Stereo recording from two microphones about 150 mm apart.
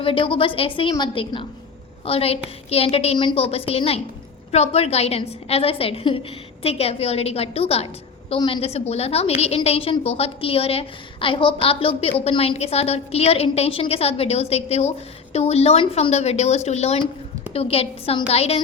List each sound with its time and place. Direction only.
0.0 s a woman's voice: 35° left (ahead or behind)